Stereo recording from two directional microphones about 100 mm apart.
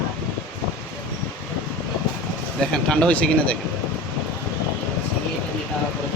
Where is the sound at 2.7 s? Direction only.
10° left (ahead or behind).